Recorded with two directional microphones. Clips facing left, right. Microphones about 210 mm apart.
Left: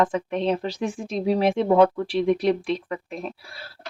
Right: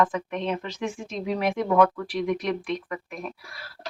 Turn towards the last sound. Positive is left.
turn(degrees=30)  # may be behind; listen again after turning